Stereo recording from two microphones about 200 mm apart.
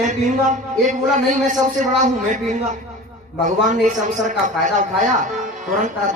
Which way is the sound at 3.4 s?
40° right (ahead or behind).